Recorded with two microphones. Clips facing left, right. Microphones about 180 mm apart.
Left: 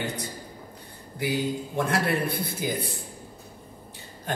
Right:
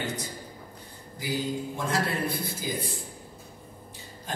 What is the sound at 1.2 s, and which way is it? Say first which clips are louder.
A man's voice: left 3 dB; 60° left (ahead or behind).